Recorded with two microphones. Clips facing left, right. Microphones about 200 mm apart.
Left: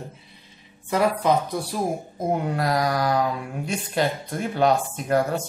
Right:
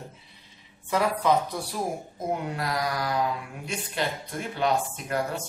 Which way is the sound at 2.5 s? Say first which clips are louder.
Left 6 dB; 40° left (ahead or behind).